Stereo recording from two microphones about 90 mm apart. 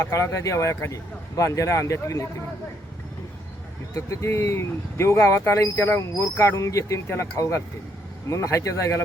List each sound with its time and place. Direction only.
0.0 s speech: 35° left (ahead or behind)
3.9 s speech: 30° left (ahead or behind)